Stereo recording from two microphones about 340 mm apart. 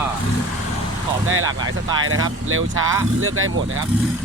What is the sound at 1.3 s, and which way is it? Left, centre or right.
Speech, right.